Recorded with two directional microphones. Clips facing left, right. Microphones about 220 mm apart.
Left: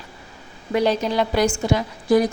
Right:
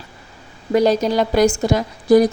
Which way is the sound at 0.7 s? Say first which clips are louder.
Right 4 dB; 40° right (ahead or behind).